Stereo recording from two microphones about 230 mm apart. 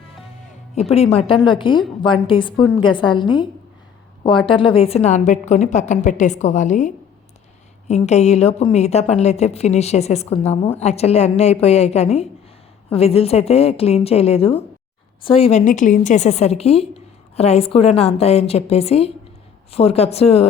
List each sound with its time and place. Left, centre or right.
0.8 s a woman's voice: left